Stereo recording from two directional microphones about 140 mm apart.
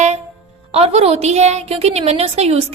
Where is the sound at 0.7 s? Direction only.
45° right (ahead or behind).